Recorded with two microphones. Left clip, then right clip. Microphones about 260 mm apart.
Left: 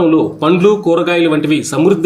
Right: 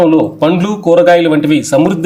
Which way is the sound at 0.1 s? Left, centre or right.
Right.